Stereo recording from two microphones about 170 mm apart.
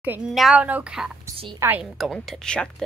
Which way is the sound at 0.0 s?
5° right (ahead or behind).